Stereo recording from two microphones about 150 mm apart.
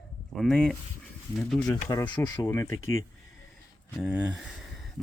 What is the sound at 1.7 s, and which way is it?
Speech, 20° left (ahead or behind).